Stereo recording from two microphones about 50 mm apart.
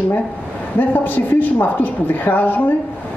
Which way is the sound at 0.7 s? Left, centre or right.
Left.